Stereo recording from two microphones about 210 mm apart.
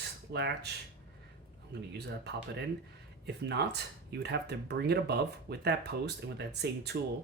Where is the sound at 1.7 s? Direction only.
50° right (ahead or behind).